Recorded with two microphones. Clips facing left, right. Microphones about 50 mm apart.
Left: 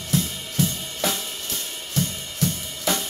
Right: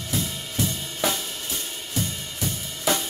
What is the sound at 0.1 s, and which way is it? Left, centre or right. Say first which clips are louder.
Drum kit: left 4 dB; centre.